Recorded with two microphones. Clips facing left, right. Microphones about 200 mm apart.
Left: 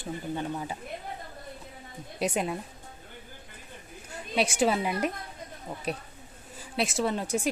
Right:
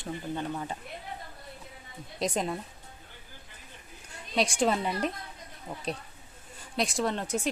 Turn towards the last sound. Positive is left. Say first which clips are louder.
# left 2 dB
turn(degrees=10)  # may be behind; listen again after turning